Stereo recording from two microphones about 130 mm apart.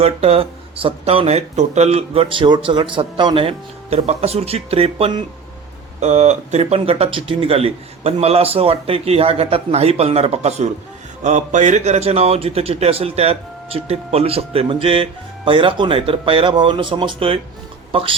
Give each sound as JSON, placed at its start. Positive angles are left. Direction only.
{"t": 0.0, "sound": "a man's voice", "side_deg": -50}
{"t": 6.0, "sound": "a man's voice", "side_deg": -60}
{"t": 11.2, "sound": "a man's voice", "side_deg": -65}